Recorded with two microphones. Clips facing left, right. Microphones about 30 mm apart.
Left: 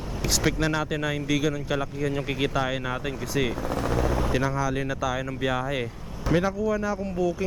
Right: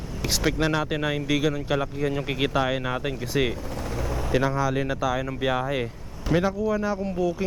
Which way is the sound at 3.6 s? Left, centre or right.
Left.